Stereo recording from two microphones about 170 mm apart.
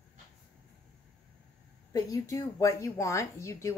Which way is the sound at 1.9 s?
20° left (ahead or behind).